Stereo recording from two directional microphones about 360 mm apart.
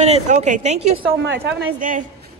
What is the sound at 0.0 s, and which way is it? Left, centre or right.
A woman's voice, centre.